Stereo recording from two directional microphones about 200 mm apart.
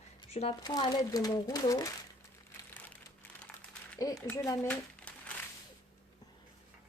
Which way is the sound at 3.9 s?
15° left (ahead or behind).